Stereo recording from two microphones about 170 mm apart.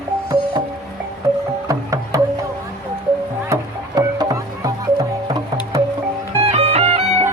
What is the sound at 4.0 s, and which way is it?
Music, 20° right (ahead or behind).